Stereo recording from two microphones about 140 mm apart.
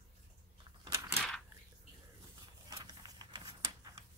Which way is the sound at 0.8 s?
20° right (ahead or behind).